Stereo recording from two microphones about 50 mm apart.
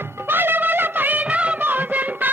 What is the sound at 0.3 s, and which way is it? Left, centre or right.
Music, right.